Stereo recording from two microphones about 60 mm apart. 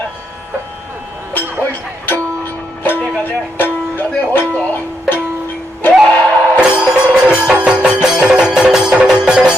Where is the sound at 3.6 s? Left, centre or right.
Left.